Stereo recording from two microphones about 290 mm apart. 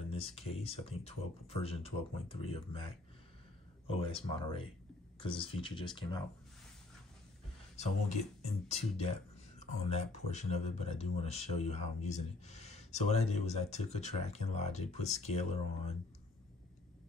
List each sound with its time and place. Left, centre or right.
0.1 s speech: centre
7.7 s speech: left